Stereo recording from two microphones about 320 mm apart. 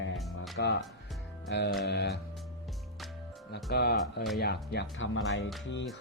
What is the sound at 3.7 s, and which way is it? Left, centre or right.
Speech, left.